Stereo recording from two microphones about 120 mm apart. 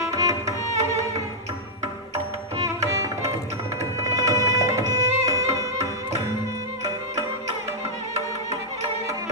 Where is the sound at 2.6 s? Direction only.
25° right (ahead or behind).